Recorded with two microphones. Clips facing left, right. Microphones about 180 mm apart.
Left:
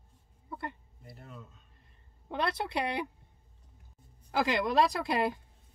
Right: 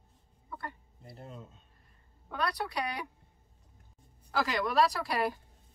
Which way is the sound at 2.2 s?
25° left (ahead or behind).